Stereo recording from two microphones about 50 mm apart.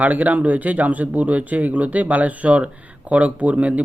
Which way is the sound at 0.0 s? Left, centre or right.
Right.